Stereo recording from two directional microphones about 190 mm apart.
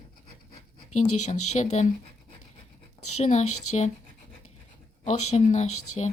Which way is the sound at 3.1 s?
35° left (ahead or behind).